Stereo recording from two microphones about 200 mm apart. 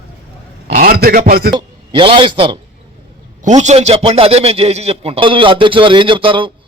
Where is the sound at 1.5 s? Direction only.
25° right (ahead or behind).